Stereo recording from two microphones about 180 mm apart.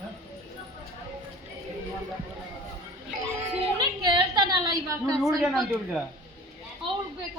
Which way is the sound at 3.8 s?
25° right (ahead or behind).